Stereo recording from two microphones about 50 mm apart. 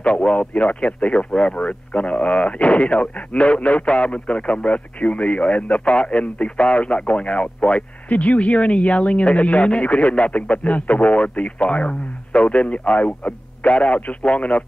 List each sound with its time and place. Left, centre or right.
0.0 s speech: left